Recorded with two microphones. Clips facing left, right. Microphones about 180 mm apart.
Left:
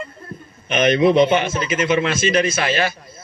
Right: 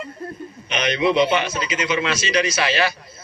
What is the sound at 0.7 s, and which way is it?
A man's voice, 50° left (ahead or behind).